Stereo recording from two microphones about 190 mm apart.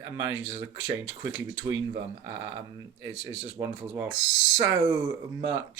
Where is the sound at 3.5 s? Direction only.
15° right (ahead or behind).